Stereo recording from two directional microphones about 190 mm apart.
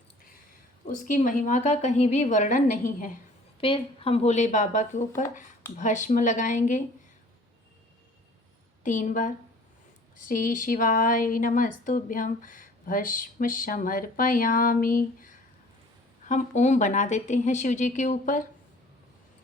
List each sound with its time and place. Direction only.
0.9 s speech: 45° left (ahead or behind)
3.6 s speech: 30° left (ahead or behind)
8.8 s speech: 40° left (ahead or behind)